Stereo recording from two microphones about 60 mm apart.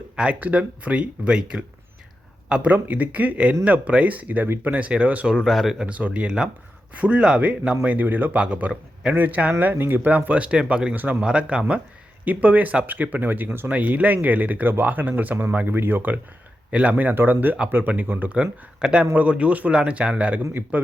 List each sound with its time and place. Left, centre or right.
0.2 s speech: right
5.3 s speech: centre
5.8 s speech: right
7.9 s speech: right
8.4 s speech: right
10.9 s speech: right
11.2 s speech: centre
18.8 s speech: centre